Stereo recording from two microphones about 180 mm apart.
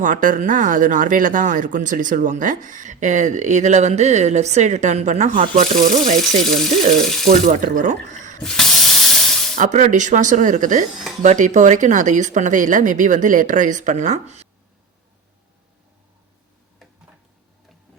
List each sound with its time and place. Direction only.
0.0 s speech: 45° right (ahead or behind)
6.6 s frying: centre (ahead or behind)
7.3 s speech: 45° right (ahead or behind)
8.4 s spray: centre (ahead or behind)
9.6 s speech: 40° right (ahead or behind)